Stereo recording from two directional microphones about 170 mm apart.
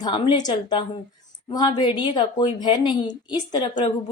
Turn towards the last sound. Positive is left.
turn(degrees=30)  # may be behind; listen again after turning